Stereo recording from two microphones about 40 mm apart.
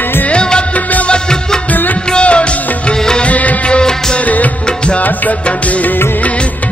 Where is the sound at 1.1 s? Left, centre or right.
Centre.